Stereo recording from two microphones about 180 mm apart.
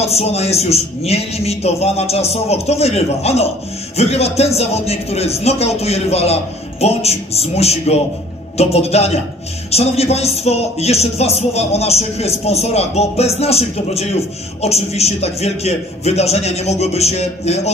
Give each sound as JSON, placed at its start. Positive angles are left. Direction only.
{"t": 0.0, "sound": "speech", "side_deg": 35}